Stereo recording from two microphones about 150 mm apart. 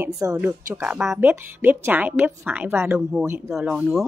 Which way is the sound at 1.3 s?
15° right (ahead or behind).